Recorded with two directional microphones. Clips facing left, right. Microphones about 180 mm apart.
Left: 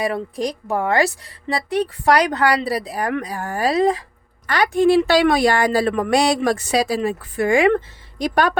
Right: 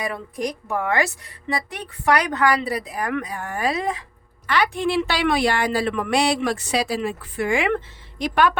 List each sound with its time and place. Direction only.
0.0 s a woman's voice: 30° left (ahead or behind)